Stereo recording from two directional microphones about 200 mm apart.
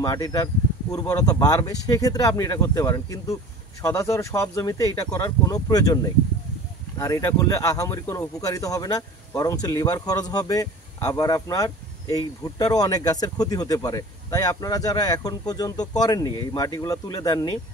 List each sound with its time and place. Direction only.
0.0 s speech: 20° left (ahead or behind)